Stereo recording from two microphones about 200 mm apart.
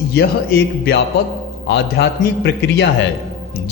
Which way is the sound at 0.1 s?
55° left (ahead or behind).